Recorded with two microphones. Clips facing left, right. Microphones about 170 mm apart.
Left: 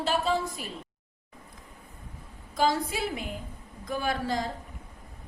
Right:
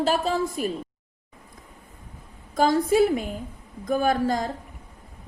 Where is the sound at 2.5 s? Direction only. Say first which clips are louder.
Right 7 dB; 50° right (ahead or behind).